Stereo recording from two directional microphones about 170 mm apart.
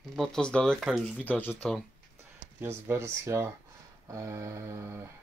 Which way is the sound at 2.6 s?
15° right (ahead or behind).